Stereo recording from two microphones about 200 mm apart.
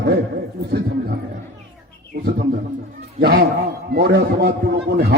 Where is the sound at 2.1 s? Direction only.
50° right (ahead or behind).